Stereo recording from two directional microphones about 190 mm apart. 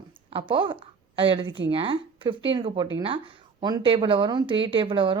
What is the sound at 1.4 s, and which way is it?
Speech, 75° right (ahead or behind).